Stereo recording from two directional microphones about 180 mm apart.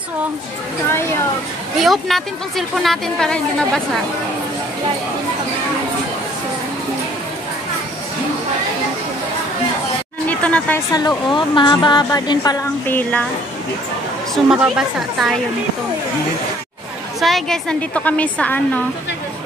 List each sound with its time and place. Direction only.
1.8 s a woman's voice: centre (ahead or behind)
10.2 s a sound: 10° left (ahead or behind)
10.9 s a woman's voice: 20° left (ahead or behind)
14.3 s a woman's voice: 5° right (ahead or behind)
17.2 s a woman's voice: centre (ahead or behind)